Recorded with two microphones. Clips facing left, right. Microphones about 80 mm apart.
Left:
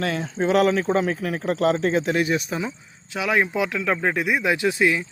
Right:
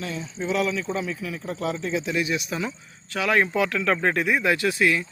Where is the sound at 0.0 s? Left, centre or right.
Left.